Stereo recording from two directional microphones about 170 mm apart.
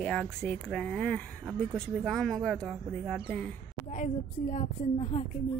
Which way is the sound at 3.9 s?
40° left (ahead or behind).